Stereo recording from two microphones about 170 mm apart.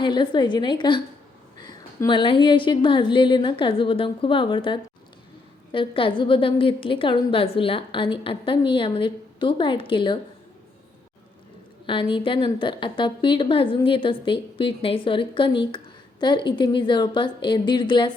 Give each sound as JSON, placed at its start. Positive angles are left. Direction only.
{"t": 0.0, "sound": "a woman's voice", "side_deg": 25}
{"t": 11.9, "sound": "a woman's voice", "side_deg": 30}